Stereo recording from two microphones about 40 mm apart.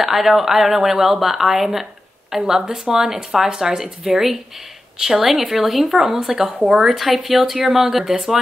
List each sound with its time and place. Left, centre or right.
0.0 s speech: centre